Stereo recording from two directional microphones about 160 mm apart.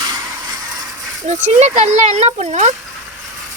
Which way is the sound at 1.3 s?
45° right (ahead or behind).